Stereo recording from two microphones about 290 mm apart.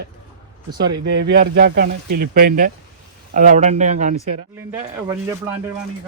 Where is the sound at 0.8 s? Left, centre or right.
Right.